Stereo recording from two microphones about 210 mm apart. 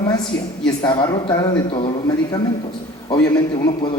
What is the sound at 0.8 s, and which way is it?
A man's voice, 20° left (ahead or behind).